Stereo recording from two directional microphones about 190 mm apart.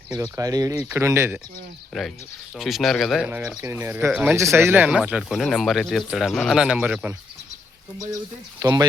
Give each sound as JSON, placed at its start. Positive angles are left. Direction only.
{"t": 0.2, "sound": "speech", "side_deg": -20}
{"t": 1.9, "sound": "speech", "side_deg": 0}
{"t": 8.6, "sound": "speech", "side_deg": -20}